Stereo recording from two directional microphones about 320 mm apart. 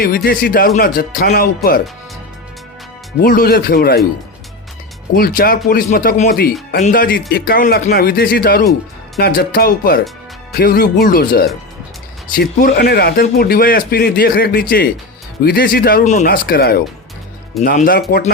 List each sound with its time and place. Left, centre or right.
0.0 s speech: left
3.2 s speech: left
5.1 s speech: left